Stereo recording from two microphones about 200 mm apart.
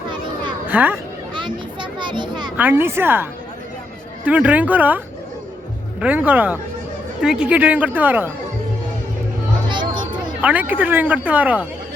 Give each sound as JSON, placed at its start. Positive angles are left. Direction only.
{"t": 0.7, "sound": "speech", "side_deg": -10}
{"t": 1.4, "sound": "children playing", "side_deg": -25}
{"t": 2.6, "sound": "speech", "side_deg": -10}
{"t": 9.6, "sound": "music", "side_deg": -25}
{"t": 10.4, "sound": "speech", "side_deg": -10}